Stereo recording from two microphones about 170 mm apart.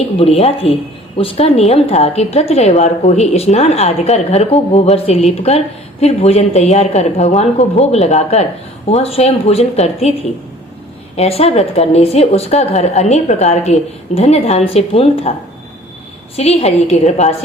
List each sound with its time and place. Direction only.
0.2 s a woman's voice: 35° left (ahead or behind)
11.2 s a woman's voice: 35° left (ahead or behind)
16.3 s a woman's voice: 40° left (ahead or behind)